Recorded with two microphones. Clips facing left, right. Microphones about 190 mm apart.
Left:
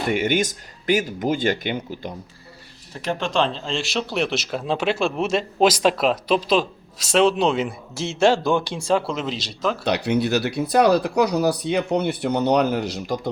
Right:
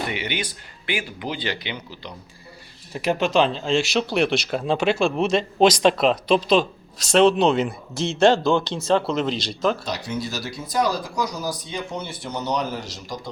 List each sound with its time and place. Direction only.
0.1 s speech: 45° left (ahead or behind)
2.9 s speech: 10° right (ahead or behind)
9.8 s speech: 65° left (ahead or behind)